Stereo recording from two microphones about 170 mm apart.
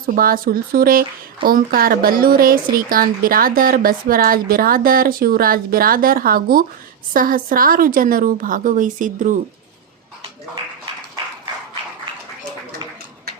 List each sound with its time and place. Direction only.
0.0 s a woman's voice: 55° right (ahead or behind)